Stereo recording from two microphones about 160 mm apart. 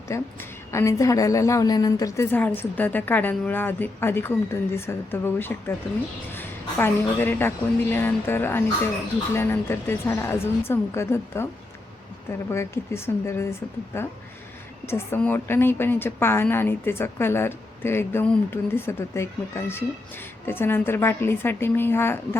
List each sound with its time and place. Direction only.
0.1 s a woman's voice: 15° left (ahead or behind)
12.5 s a woman's voice: 15° left (ahead or behind)